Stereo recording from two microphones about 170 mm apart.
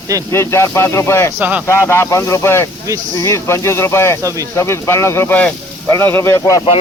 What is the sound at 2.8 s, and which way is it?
Speech, 20° right (ahead or behind).